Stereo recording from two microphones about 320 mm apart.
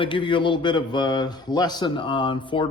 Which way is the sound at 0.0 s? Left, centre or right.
Centre.